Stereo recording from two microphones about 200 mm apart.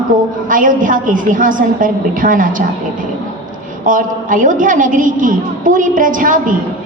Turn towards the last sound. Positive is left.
turn(degrees=-40)  # may be behind; listen again after turning